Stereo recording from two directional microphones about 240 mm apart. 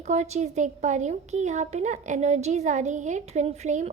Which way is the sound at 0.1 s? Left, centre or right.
Right.